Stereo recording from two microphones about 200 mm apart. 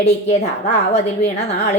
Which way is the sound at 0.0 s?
35° left (ahead or behind).